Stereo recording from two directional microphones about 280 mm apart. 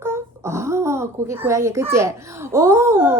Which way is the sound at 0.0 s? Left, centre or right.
Centre.